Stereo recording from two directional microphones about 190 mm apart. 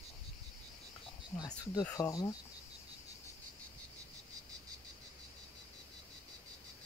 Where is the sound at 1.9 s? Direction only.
20° left (ahead or behind).